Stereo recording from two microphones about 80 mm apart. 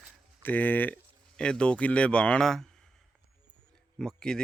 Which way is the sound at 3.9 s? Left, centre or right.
Centre.